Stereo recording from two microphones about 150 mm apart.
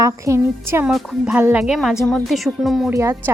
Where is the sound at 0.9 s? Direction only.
Centre (ahead or behind).